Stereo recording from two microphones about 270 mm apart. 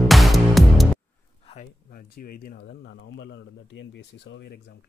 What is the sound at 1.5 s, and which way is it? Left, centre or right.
Speech, left.